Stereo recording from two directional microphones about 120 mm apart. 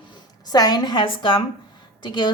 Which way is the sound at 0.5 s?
35° left (ahead or behind).